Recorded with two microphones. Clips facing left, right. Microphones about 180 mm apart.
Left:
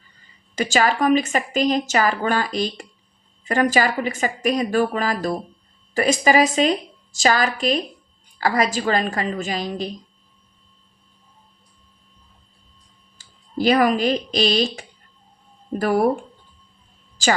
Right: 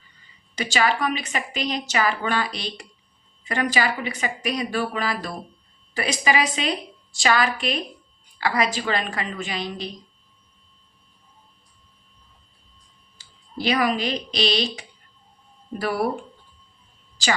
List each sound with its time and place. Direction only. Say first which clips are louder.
0.5 s a woman's voice: left 3 dB; 45° left (ahead or behind)
13.1 s speech: left 8 dB; 45° left (ahead or behind)